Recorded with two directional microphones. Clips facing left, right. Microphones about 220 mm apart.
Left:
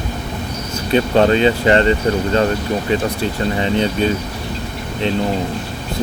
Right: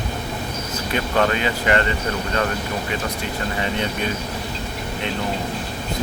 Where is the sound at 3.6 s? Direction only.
30° left (ahead or behind).